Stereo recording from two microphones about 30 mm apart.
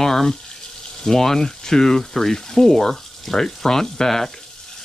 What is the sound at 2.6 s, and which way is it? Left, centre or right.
Frying, centre.